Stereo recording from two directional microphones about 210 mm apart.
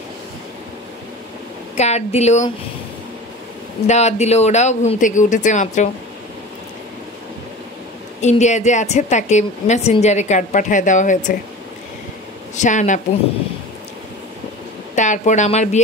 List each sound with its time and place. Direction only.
1.8 s speech: 30° left (ahead or behind)
3.8 s speech: 30° left (ahead or behind)
8.2 s speech: 35° left (ahead or behind)
12.5 s speech: 35° left (ahead or behind)
15.0 s speech: 35° left (ahead or behind)